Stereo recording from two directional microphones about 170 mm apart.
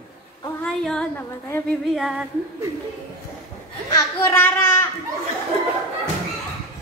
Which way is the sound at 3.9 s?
15° left (ahead or behind).